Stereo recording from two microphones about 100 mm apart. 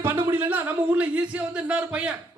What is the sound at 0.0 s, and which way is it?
A man's voice, 20° right (ahead or behind).